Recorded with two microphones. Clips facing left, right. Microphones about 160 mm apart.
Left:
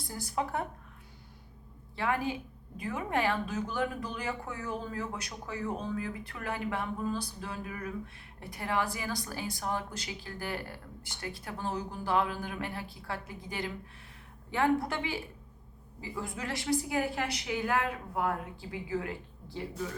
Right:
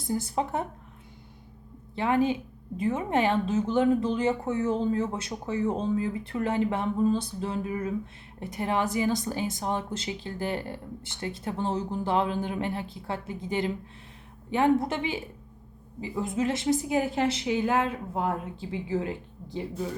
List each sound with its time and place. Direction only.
0.1 s a woman's voice: 25° right (ahead or behind)
2.0 s a woman's voice: 20° right (ahead or behind)